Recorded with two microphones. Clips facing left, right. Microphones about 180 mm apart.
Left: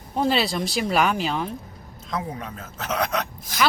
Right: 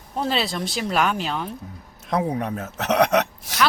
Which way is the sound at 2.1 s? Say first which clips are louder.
Right 7 dB; 65° right (ahead or behind).